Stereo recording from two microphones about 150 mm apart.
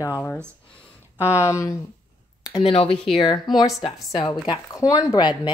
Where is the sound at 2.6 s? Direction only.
40° left (ahead or behind).